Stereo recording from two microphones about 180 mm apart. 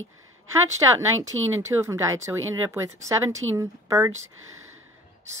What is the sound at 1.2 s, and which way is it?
Speech, 90° right.